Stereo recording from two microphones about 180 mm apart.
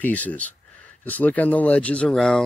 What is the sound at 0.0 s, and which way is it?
Speech, 10° left (ahead or behind).